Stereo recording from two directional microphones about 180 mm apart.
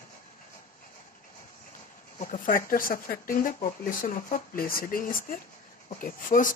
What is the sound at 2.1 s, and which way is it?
Speech, 45° left (ahead or behind).